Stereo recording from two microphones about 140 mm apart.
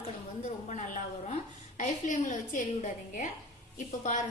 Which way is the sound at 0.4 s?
60° left (ahead or behind).